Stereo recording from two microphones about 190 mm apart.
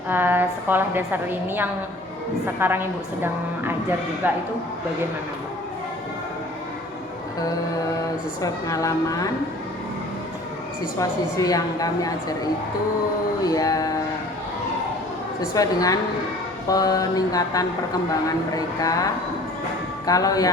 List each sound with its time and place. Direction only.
0.1 s a woman's voice: 10° right (ahead or behind)
8.4 s a woman's voice: 20° left (ahead or behind)
11.0 s a woman's voice: 20° left (ahead or behind)
13.4 s a woman's voice: 20° left (ahead or behind)
15.5 s a woman's voice: 20° left (ahead or behind)
20.1 s a woman's voice: 20° left (ahead or behind)